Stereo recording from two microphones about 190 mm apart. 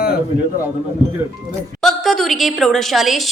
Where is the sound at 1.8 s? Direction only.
Centre (ahead or behind).